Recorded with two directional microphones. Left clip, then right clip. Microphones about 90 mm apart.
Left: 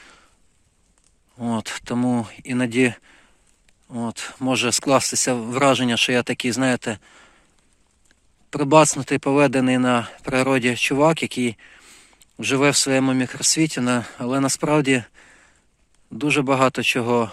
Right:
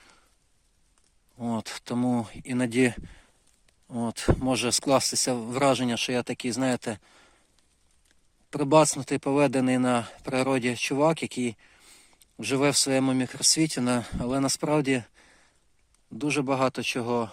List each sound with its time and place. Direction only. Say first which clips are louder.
0.0 s a sound: left 9 dB; centre (ahead or behind)
1.4 s speech: left 6 dB; 20° right (ahead or behind)
2.6 s speech: left 4 dB; 45° right (ahead or behind)
3.9 s speech: right 2 dB; 75° right (ahead or behind)
4.4 s speech: left 8 dB; 30° right (ahead or behind)
5.9 s speech: left 9 dB; 5° right (ahead or behind)
6.6 s speech: left 6 dB; 20° right (ahead or behind)
8.4 s speech: left 6 dB; 25° right (ahead or behind); by 12.0 s 5° right (ahead or behind)
12.1 s speech: left 6 dB; 20° right (ahead or behind)
16.0 s speech: left 7 dB; 5° right (ahead or behind)